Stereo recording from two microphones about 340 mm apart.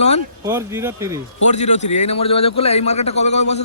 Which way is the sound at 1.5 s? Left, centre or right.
Centre.